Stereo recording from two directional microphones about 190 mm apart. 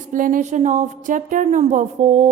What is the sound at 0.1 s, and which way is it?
A woman's voice, 45° right (ahead or behind).